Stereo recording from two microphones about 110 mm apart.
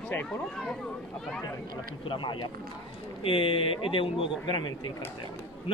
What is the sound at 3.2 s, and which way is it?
Speech, 55° left (ahead or behind).